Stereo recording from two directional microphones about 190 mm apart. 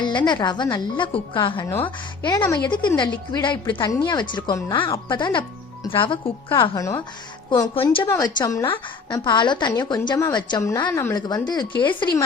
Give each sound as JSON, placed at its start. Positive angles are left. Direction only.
{"t": 0.3, "sound": "speech", "side_deg": 25}
{"t": 2.6, "sound": "a woman's voice", "side_deg": 25}